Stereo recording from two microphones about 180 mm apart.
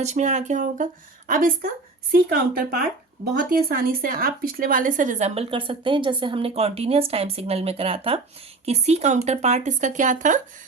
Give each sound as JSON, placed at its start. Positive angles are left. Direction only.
{"t": 0.0, "sound": "a woman's voice", "side_deg": -40}